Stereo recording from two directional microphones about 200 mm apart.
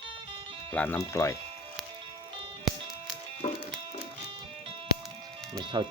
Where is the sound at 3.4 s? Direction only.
30° left (ahead or behind).